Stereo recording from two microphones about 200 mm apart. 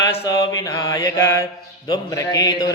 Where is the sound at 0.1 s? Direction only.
30° left (ahead or behind).